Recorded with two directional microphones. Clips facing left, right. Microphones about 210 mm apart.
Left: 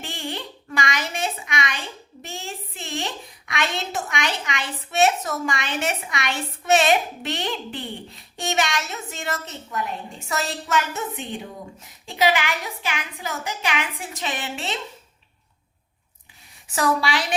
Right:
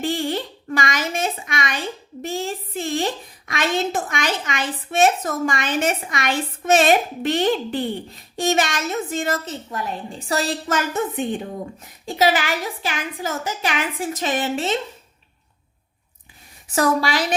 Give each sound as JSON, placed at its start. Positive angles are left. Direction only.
{"t": 0.0, "sound": "a sound", "side_deg": -40}
{"t": 12.0, "sound": "a woman's voice", "side_deg": -40}
{"t": 16.7, "sound": "a woman's voice", "side_deg": -45}